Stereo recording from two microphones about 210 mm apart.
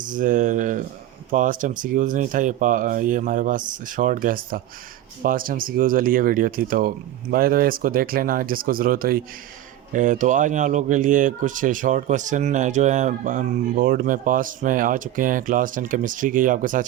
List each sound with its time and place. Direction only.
0.1 s speech: 40° right (ahead or behind)